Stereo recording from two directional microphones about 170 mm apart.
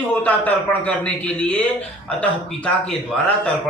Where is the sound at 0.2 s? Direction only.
10° left (ahead or behind).